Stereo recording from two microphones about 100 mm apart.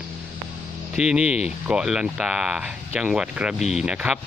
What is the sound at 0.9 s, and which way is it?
Speech, 5° right (ahead or behind).